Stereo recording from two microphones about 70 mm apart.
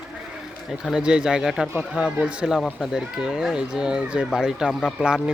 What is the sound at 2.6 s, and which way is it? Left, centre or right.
Speech, centre.